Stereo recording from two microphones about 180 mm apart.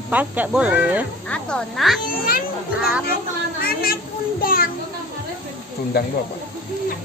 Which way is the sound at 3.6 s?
55° left (ahead or behind).